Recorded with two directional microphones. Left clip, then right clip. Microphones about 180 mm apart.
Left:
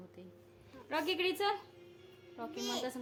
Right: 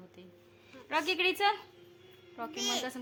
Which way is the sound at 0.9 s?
10° right (ahead or behind).